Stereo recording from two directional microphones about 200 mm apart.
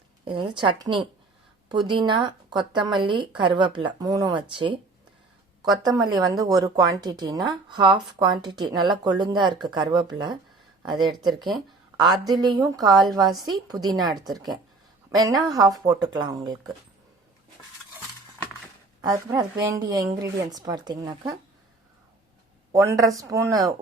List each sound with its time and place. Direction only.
0.5 s a woman's voice: 25° right (ahead or behind)
5.8 s a woman's voice: 20° right (ahead or behind)
19.0 s a woman's voice: 20° right (ahead or behind)
22.7 s a woman's voice: 15° right (ahead or behind)